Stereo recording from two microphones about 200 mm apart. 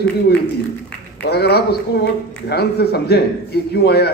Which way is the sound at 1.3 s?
55° left (ahead or behind).